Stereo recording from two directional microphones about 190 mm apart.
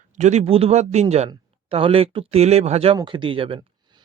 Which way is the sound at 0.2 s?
35° right (ahead or behind).